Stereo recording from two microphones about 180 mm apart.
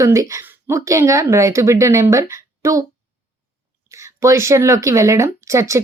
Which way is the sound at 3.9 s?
15° right (ahead or behind).